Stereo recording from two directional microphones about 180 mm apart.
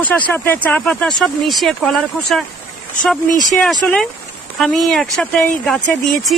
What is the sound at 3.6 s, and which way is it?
Speech, 5° left (ahead or behind).